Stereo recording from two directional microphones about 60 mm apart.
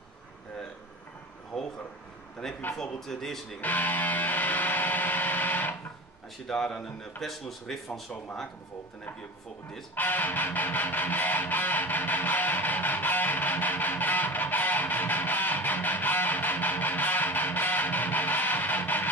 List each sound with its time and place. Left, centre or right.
1.5 s a sound: centre
2.7 s speech: centre
3.6 s music: left
6.4 s speech: centre
9.9 s music: left